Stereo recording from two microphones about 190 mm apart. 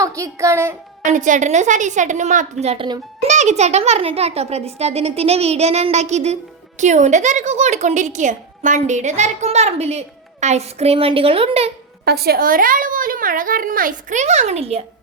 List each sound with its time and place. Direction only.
0.0 s a woman's voice: 15° right (ahead or behind)
1.0 s a woman's voice: 40° right (ahead or behind); by 3.0 s 25° right (ahead or behind)
3.2 s a woman's voice: 35° right (ahead or behind)
12.0 s a woman's voice: 55° right (ahead or behind); by 14.8 s 35° right (ahead or behind)